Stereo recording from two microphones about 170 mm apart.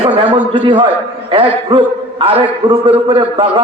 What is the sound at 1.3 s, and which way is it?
A man's voice, 30° right (ahead or behind).